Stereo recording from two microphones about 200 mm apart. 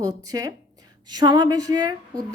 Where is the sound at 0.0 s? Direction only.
15° right (ahead or behind).